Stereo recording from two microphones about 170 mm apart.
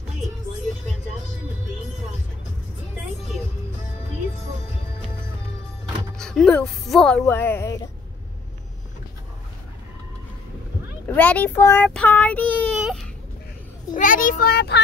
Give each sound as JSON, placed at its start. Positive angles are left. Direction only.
{"t": 6.1, "sound": "speech", "side_deg": 5}
{"t": 7.2, "sound": "child singing", "side_deg": 15}
{"t": 11.1, "sound": "child singing", "side_deg": 10}
{"t": 12.7, "sound": "baby cry", "side_deg": -5}
{"t": 13.9, "sound": "a child's voice", "side_deg": 50}